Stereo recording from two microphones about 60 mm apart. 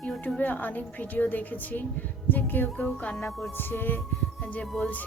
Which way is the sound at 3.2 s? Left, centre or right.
Centre.